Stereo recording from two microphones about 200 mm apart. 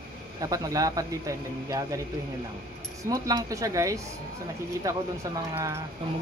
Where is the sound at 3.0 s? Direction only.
20° right (ahead or behind).